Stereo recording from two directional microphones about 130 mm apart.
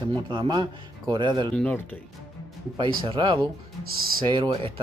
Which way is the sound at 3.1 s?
45° right (ahead or behind).